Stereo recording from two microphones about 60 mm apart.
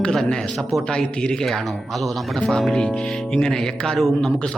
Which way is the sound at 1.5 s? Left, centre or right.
Centre.